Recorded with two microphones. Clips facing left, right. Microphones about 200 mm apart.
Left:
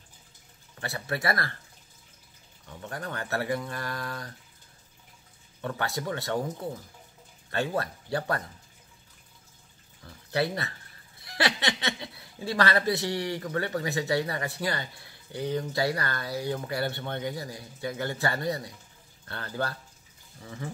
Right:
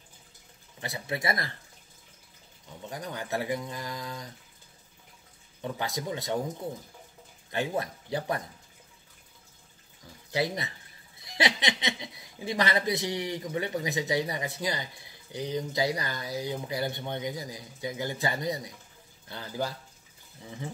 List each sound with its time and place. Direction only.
0.7 s speech: 20° right (ahead or behind)
2.8 s speech: 15° right (ahead or behind)
5.7 s speech: 20° right (ahead or behind)
7.5 s speech: 15° right (ahead or behind)
11.1 s speech: 20° right (ahead or behind)